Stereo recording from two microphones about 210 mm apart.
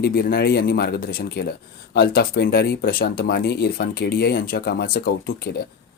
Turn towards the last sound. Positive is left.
turn(degrees=45)  # may be behind; listen again after turning